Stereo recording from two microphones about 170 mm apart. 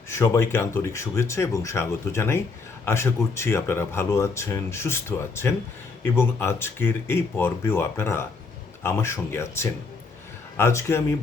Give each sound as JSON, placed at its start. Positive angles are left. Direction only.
{"t": 0.1, "sound": "speech", "side_deg": 15}